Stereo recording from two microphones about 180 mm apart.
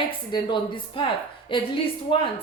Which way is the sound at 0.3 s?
25° left (ahead or behind).